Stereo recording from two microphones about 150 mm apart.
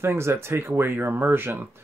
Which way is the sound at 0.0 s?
15° right (ahead or behind).